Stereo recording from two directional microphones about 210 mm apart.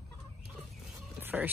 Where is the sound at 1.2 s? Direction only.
10° right (ahead or behind).